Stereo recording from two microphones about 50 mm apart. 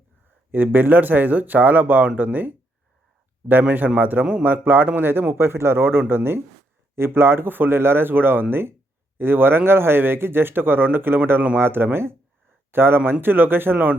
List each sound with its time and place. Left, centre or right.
0.5 s speech: right
5.3 s speech: right